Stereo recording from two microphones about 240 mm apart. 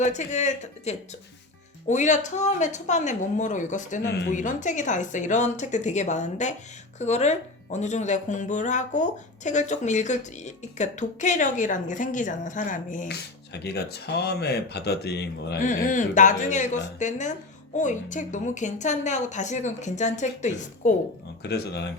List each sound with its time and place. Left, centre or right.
0.0 s a woman's voice: left
15.7 s a woman's voice: left
21.4 s speech: left